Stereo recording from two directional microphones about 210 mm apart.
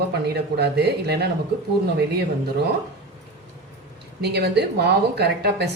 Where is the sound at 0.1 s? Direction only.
50° right (ahead or behind).